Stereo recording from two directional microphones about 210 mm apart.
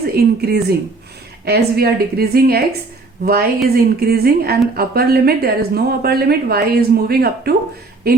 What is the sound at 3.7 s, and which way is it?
Speech, 45° right (ahead or behind).